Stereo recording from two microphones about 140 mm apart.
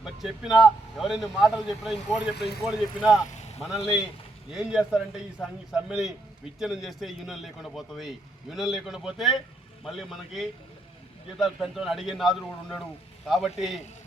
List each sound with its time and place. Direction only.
0.0 s a man's voice: 5° right (ahead or behind)
3.2 s vehicle: 55° left (ahead or behind)
3.6 s a man's voice: centre (ahead or behind)